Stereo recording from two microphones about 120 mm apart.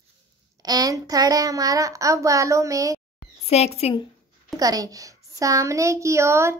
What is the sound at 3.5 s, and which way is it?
Speech, 60° left (ahead or behind).